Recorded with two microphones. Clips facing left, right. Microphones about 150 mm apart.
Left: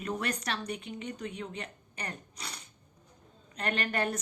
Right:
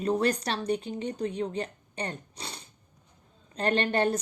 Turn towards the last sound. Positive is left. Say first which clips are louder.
# right 6 dB
turn(degrees=-30)  # may be behind; listen again after turning